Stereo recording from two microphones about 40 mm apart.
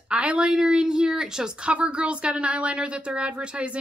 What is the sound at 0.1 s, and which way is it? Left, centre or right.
A woman's voice, right.